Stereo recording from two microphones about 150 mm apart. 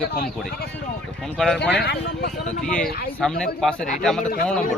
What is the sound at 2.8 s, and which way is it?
Speech, 90° left.